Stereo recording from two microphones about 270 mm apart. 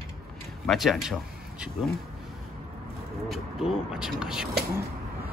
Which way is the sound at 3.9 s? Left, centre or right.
Centre.